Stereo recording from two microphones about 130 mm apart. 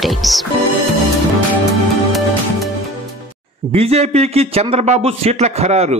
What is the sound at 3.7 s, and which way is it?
A man's voice, 50° right (ahead or behind).